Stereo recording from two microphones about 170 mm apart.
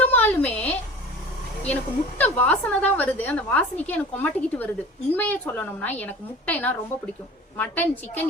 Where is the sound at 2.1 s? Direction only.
10° left (ahead or behind).